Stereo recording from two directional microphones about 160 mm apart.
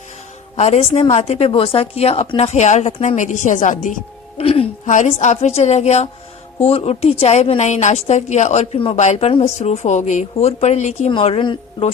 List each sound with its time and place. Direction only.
0.5 s a woman's voice: 40° left (ahead or behind)
4.4 s music: 35° left (ahead or behind)
4.9 s a woman's voice: 50° left (ahead or behind)